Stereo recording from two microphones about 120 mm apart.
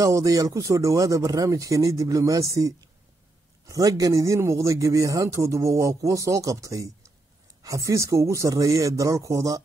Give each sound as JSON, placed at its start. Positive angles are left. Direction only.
{"t": 0.0, "sound": "a man's voice", "side_deg": -30}